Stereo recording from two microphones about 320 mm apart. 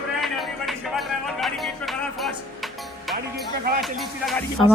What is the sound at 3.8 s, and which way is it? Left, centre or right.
Speech, centre.